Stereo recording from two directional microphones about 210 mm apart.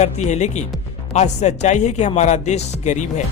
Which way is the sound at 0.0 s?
35° left (ahead or behind).